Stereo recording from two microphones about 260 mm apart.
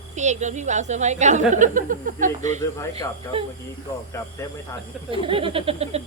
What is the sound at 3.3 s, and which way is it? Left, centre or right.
Speech, centre.